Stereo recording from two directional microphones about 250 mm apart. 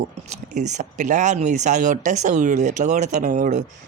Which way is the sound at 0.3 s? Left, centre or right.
Right.